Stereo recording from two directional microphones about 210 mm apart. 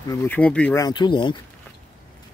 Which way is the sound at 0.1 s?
10° left (ahead or behind).